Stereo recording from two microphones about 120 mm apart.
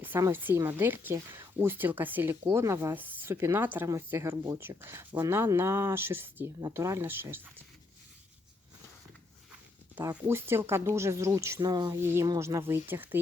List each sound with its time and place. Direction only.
0.0 s speech: 20° right (ahead or behind)
10.0 s speech: 25° right (ahead or behind)
11.9 s speech: 20° right (ahead or behind)